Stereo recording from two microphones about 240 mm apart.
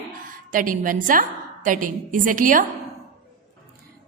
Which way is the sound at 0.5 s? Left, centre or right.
Right.